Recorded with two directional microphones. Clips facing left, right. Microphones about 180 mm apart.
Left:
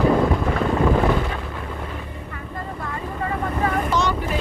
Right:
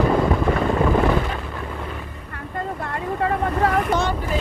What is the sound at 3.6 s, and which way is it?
Boat, 55° right (ahead or behind).